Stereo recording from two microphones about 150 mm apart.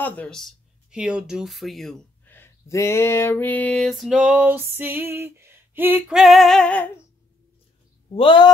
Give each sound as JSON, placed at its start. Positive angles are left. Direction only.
{"t": 0.0, "sound": "speech", "side_deg": 10}
{"t": 2.2, "sound": "a sound", "side_deg": 15}
{"t": 8.1, "sound": "speech", "side_deg": 35}